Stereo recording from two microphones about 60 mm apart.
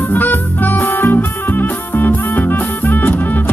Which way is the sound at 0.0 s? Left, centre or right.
Left.